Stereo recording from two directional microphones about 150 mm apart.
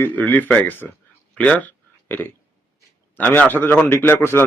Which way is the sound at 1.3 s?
10° left (ahead or behind).